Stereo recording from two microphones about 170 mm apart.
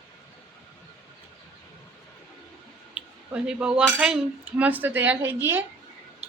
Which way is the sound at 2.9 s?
5° right (ahead or behind).